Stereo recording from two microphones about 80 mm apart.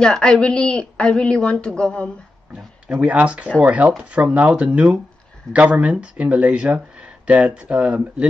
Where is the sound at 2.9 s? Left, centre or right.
Centre.